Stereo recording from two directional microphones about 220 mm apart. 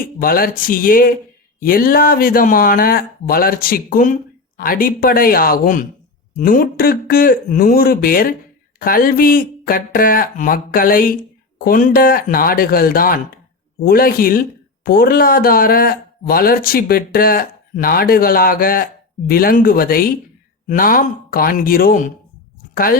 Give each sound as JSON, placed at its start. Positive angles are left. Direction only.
{"t": 0.2, "sound": "speech", "side_deg": 40}